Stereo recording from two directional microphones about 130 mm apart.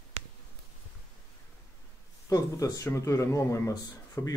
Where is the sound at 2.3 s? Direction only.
25° left (ahead or behind).